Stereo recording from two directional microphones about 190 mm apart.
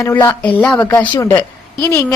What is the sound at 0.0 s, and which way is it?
A woman's voice, 15° left (ahead or behind).